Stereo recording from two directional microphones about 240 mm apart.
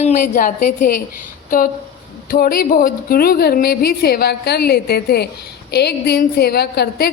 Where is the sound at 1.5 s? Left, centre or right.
Left.